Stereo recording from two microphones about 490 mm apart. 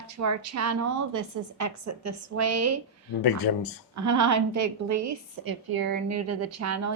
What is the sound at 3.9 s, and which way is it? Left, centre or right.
A woman's voice, right.